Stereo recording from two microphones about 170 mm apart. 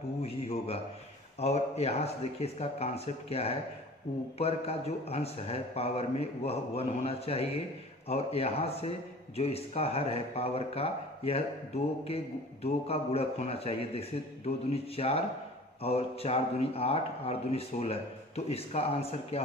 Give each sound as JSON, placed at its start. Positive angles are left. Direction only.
{"t": 0.2, "sound": "speech", "side_deg": 35}